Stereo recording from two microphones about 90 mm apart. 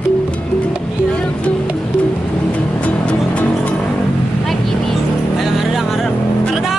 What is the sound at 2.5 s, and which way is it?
Music, 15° left (ahead or behind).